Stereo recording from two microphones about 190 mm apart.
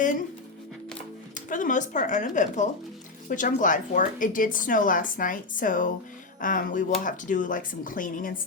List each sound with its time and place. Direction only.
0.0 s a woman's voice: 45° left (ahead or behind)
1.5 s a woman's voice: 45° left (ahead or behind)